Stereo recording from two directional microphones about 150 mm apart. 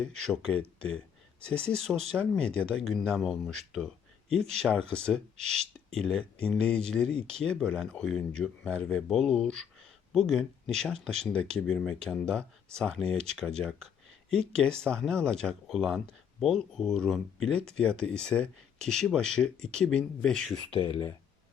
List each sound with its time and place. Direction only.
0.2 s speech: 5° left (ahead or behind)
20.7 s speech: 35° left (ahead or behind)